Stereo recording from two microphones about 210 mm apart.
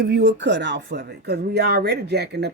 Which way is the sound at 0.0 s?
55° right (ahead or behind).